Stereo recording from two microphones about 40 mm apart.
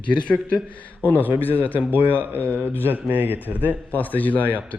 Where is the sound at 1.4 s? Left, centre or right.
Left.